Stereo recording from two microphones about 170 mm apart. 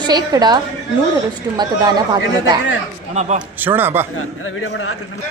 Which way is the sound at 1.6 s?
25° right (ahead or behind).